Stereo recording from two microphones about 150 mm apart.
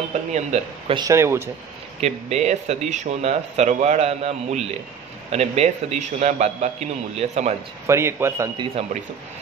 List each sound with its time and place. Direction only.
0.1 s speech: 50° right (ahead or behind)
0.9 s a man's voice: 20° right (ahead or behind)
2.0 s speech: 45° right (ahead or behind)
7.8 s a man's voice: 20° right (ahead or behind)
8.8 s speech: 40° right (ahead or behind)